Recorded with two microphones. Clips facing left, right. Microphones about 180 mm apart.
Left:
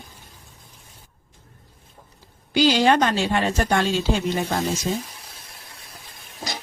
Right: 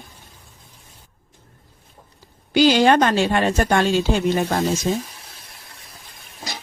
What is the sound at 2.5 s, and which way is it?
A woman's voice, 55° right (ahead or behind).